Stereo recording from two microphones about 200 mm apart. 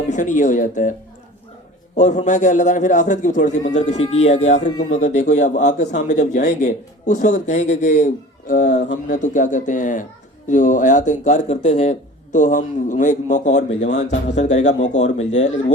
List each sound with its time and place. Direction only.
0.1 s speech: 40° left (ahead or behind)
2.0 s speech: 35° left (ahead or behind)